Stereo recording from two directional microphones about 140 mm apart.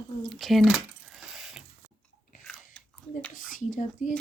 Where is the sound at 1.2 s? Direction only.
5° right (ahead or behind).